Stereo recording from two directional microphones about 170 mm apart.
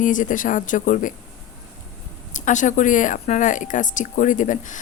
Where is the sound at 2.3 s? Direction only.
50° left (ahead or behind).